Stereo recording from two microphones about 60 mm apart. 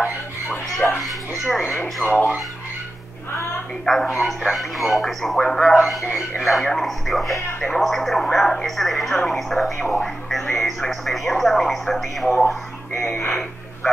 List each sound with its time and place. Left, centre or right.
0.5 s music: centre
1.0 s music: centre
2.0 s speech: right
3.8 s speech: centre